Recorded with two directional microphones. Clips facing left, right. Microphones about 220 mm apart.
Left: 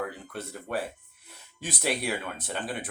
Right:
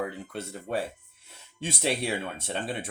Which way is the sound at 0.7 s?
25° right (ahead or behind).